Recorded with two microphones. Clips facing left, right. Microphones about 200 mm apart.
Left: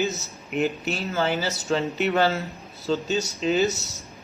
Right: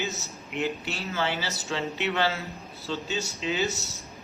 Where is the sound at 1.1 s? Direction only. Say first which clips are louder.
Left 4 dB; 40° left (ahead or behind).